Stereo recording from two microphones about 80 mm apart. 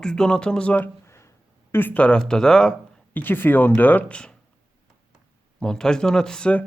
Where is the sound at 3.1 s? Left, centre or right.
Left.